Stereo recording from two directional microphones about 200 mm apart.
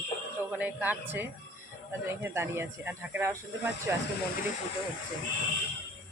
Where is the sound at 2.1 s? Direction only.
10° right (ahead or behind).